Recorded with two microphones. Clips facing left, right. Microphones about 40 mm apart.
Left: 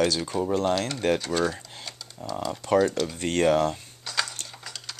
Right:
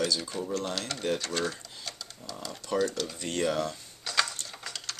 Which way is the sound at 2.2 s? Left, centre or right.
Left.